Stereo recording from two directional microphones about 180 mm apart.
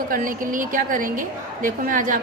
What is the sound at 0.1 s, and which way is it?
A woman's voice, 50° right (ahead or behind).